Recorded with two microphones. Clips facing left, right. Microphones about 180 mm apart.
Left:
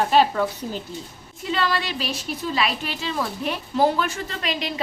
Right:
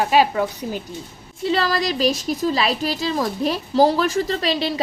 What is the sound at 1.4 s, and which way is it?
A woman's voice, 35° right (ahead or behind).